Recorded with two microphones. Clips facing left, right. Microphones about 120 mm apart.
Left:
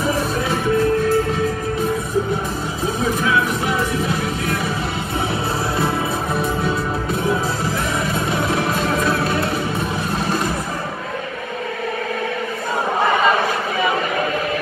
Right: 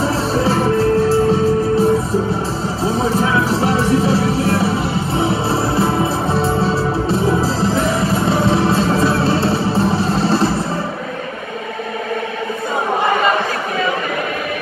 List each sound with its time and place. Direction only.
0.3 s music: 35° right (ahead or behind)